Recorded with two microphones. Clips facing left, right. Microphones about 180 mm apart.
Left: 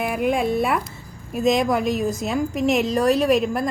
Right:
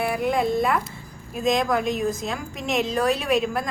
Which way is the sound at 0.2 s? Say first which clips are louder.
Left 4 dB; 10° left (ahead or behind).